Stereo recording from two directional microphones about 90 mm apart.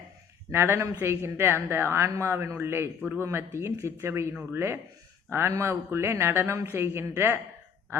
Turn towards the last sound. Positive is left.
turn(degrees=-25)  # may be behind; listen again after turning